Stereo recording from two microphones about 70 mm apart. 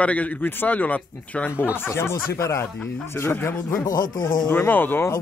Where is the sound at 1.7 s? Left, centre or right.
Left.